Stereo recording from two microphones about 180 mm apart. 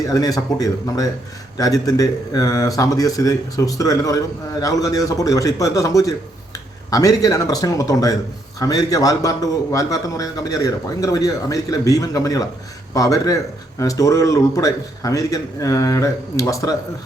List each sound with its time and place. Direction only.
0.0 s a man's voice: 20° left (ahead or behind)